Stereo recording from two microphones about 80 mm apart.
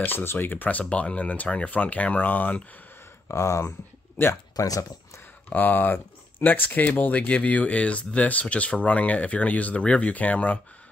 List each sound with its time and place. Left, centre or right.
0.0 s speech: left
3.3 s speech: left
4.6 s speech: left
5.5 s speech: left